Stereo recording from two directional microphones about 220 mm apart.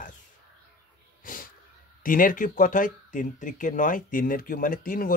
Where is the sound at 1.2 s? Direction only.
40° left (ahead or behind).